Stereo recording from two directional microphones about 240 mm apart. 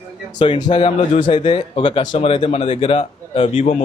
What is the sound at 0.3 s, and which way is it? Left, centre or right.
A man's voice, left.